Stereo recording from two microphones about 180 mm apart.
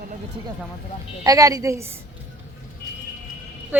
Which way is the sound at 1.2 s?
20° right (ahead or behind).